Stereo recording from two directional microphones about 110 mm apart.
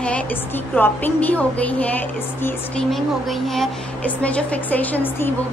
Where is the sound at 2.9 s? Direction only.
Centre (ahead or behind).